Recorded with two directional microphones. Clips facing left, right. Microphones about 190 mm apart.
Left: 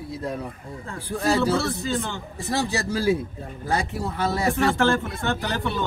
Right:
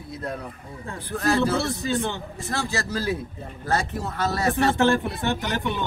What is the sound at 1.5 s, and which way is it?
Speech, 15° right (ahead or behind).